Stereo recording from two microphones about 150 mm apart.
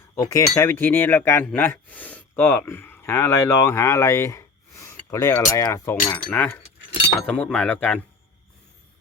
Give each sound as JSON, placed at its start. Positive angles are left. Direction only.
{"t": 0.2, "sound": "speech", "side_deg": 20}